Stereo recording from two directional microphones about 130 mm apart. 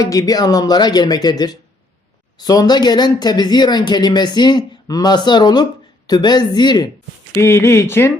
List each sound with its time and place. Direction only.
0.0 s speech: 25° left (ahead or behind)
7.4 s speech: 20° left (ahead or behind)